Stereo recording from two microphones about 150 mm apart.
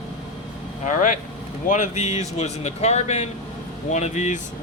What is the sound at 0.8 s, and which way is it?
Speech, 55° left (ahead or behind).